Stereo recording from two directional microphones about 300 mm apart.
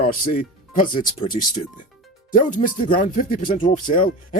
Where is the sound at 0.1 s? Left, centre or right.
Left.